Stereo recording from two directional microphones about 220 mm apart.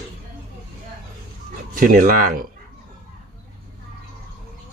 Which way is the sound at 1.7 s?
40° right (ahead or behind).